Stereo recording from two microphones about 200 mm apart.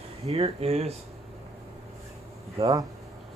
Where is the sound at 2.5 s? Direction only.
20° right (ahead or behind).